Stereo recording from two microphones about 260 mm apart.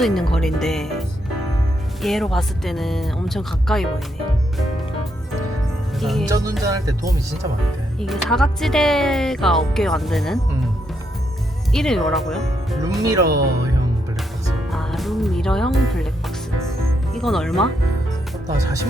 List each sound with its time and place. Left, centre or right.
0.0 s speech: centre
6.0 s music: centre
6.2 s speech: centre
7.9 s speech: centre
11.7 s speech: centre
13.0 s speech: centre
14.7 s music: centre
17.2 s speech: centre
18.4 s speech: centre